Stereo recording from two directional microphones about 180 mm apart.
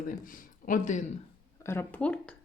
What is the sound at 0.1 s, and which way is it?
Speech, 50° left (ahead or behind).